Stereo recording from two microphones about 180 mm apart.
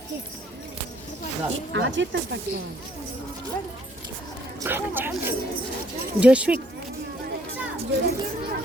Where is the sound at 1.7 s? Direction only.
90° right.